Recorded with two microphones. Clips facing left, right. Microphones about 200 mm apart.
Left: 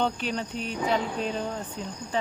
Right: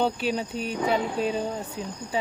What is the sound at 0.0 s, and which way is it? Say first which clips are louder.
Speech: right 3 dB; 10° right (ahead or behind).